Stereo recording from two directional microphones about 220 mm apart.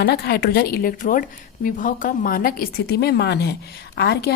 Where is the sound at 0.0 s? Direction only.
45° left (ahead or behind).